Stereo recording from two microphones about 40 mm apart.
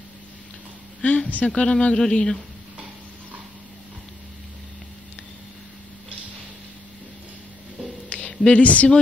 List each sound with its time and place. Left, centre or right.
1.0 s speech: left; by 2.4 s centre
8.5 s speech: left